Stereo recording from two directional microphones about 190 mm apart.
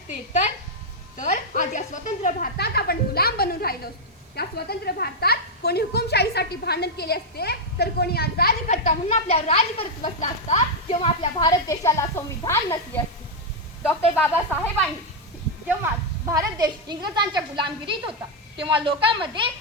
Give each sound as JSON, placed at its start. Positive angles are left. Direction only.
{"t": 1.1, "sound": "a woman's voice", "side_deg": 40}
{"t": 14.2, "sound": "a woman's voice", "side_deg": 10}
{"t": 15.8, "sound": "a woman's voice", "side_deg": -15}